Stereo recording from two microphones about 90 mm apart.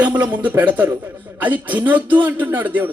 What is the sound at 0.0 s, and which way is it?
Speech, 15° right (ahead or behind).